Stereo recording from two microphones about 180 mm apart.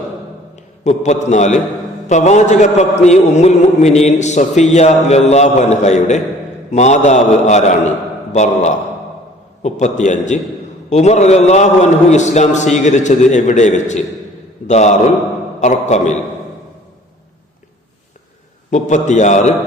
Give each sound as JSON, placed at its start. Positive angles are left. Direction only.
{"t": 0.5, "sound": "a man's voice", "side_deg": 40}
{"t": 18.7, "sound": "a man's voice", "side_deg": 40}